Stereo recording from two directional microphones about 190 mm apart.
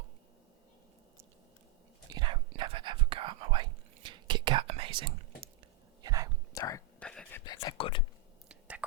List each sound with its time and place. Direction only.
2.0 s whispering: 25° right (ahead or behind)
6.5 s whispering: 15° left (ahead or behind)
7.0 s whispering: 5° left (ahead or behind)
7.4 s whispering: 20° left (ahead or behind)
8.4 s whispering: 10° right (ahead or behind)